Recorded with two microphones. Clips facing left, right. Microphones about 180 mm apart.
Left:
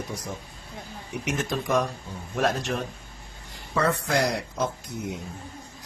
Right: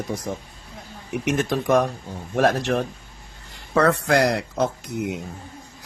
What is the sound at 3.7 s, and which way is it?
A man's voice, 75° right (ahead or behind).